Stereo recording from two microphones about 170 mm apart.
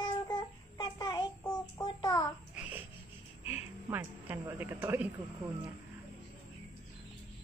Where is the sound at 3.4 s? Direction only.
10° right (ahead or behind).